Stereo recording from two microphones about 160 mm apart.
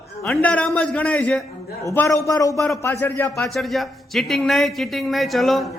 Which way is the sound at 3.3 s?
Centre (ahead or behind).